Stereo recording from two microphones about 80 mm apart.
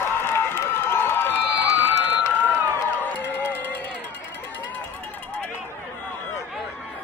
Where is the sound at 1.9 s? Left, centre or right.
Left.